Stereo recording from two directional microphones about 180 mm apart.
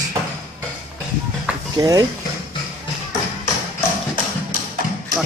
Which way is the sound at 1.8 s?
20° right (ahead or behind).